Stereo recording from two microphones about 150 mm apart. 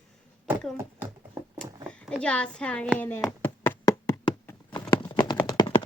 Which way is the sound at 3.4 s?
15° left (ahead or behind).